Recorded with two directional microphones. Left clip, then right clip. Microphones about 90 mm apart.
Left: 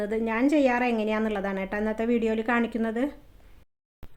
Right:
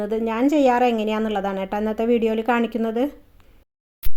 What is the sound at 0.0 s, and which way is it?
A woman's voice, 40° right (ahead or behind).